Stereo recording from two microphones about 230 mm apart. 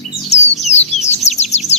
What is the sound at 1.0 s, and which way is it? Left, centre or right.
Chirp, left.